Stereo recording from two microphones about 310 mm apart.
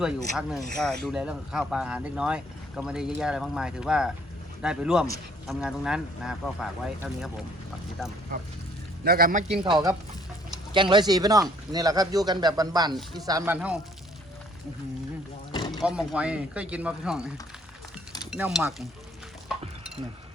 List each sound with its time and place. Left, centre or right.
0.0 s speech: centre
9.0 s a man's voice: right
9.6 s speech: centre
15.5 s a sound: centre
15.8 s speech: centre
19.5 s stir: centre